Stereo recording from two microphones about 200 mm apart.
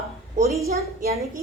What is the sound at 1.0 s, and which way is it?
Speech, 45° right (ahead or behind).